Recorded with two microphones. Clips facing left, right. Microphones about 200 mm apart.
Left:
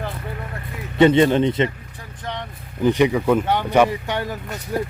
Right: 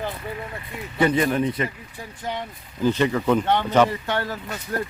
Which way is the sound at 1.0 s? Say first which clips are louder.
Left 6 dB; 25° left (ahead or behind).